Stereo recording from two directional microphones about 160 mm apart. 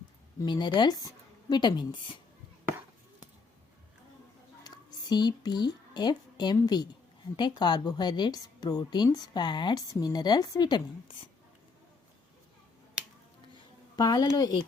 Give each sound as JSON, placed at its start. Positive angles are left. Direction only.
{"t": 0.3, "sound": "speech", "side_deg": 30}
{"t": 4.6, "sound": "a woman's voice", "side_deg": 25}
{"t": 13.9, "sound": "a woman's voice", "side_deg": 25}